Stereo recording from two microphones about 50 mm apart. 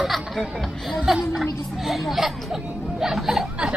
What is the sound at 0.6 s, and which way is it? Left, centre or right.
Speech, centre.